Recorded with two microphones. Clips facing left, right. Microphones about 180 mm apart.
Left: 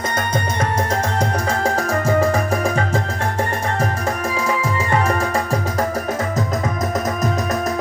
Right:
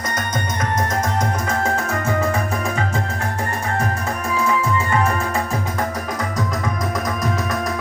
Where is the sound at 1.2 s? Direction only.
30° left (ahead or behind).